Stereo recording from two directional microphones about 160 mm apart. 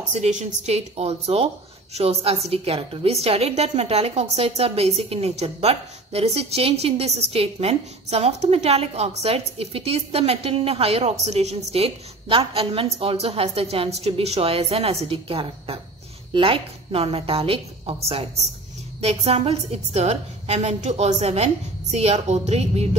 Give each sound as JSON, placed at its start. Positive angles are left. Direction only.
{"t": 0.1, "sound": "a woman's voice", "side_deg": -45}